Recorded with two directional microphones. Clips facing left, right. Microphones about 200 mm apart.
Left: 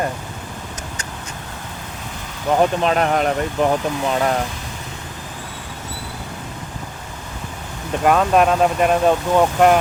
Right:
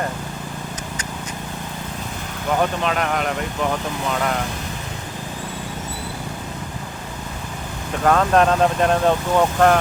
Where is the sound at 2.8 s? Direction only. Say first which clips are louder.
Left 4 dB; 35° left (ahead or behind).